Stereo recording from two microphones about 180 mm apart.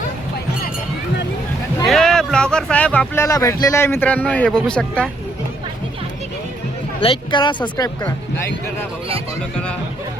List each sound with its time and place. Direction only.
1.9 s speech: 5° left (ahead or behind)
7.0 s speech: 30° left (ahead or behind)